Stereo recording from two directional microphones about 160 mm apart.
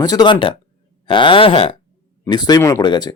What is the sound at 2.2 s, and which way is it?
Speech, 25° left (ahead or behind).